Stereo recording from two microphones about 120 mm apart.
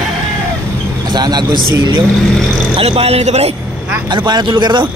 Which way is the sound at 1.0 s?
35° right (ahead or behind).